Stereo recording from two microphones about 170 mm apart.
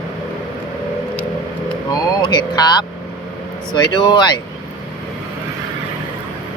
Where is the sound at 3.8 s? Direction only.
25° left (ahead or behind).